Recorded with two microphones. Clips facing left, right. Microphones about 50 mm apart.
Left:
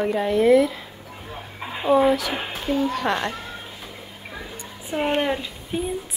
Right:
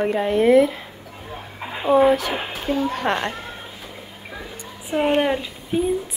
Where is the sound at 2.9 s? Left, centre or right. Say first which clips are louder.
Right 1 dB; right.